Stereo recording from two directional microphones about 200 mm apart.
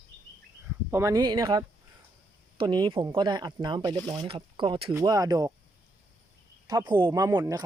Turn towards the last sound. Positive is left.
turn(degrees=-15)  # may be behind; listen again after turning